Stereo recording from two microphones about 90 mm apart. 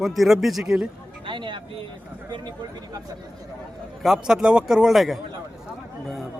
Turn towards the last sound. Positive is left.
turn(degrees=0)  # may be behind; listen again after turning